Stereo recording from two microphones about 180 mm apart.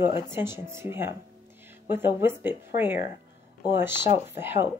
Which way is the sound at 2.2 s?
10° right (ahead or behind).